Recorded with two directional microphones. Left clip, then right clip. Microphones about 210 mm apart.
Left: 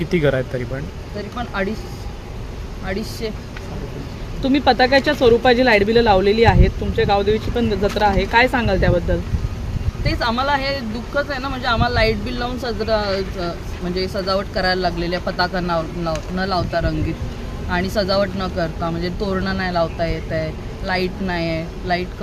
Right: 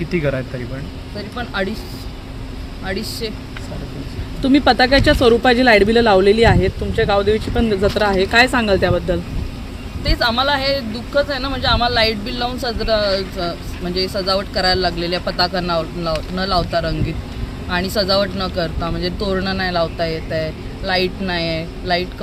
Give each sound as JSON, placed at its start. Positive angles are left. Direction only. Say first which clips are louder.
{"t": 0.1, "sound": "speech", "louder": "left 3 dB", "side_deg": 15}
{"t": 1.4, "sound": "speech", "louder": "right 1 dB", "side_deg": 0}
{"t": 2.8, "sound": "speech", "louder": "right 2 dB", "side_deg": 5}
{"t": 4.4, "sound": "speech", "louder": "right 2 dB", "side_deg": -40}
{"t": 10.0, "sound": "speech", "louder": "right 3 dB", "side_deg": 5}